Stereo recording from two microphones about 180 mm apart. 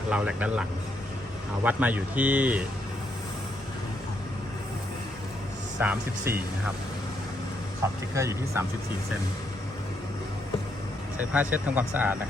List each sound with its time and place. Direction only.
0.1 s speech: 5° right (ahead or behind)
5.8 s speech: 10° right (ahead or behind)
8.1 s speech: 15° right (ahead or behind)
11.2 s speech: 10° right (ahead or behind)